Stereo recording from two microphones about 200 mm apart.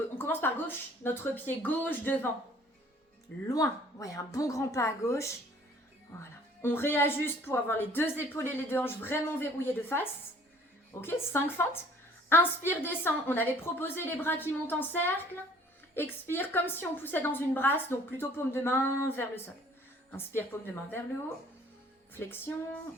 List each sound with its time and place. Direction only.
0.2 s a woman's voice: 10° left (ahead or behind)
3.4 s a woman's voice: 15° left (ahead or behind)
22.1 s a woman's voice: 10° left (ahead or behind)